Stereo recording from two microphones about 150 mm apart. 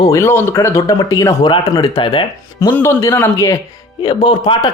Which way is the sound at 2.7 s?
20° left (ahead or behind).